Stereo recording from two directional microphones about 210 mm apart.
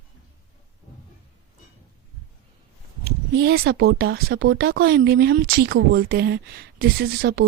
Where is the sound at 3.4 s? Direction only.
50° right (ahead or behind).